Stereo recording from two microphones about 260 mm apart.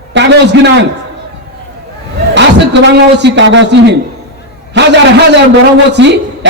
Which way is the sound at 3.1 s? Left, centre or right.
Right.